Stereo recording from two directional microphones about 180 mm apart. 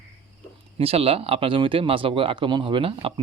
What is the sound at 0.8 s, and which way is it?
Speech, 35° right (ahead or behind).